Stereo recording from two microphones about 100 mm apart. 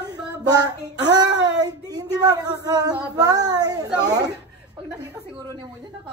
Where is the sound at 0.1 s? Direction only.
40° right (ahead or behind).